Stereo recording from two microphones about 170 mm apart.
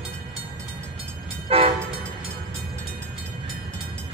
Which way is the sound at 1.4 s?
35° right (ahead or behind).